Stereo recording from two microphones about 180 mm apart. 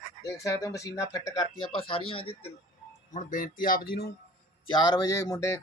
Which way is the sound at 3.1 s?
45° left (ahead or behind).